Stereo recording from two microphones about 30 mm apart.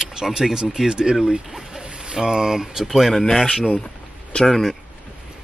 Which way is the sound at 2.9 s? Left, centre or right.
Centre.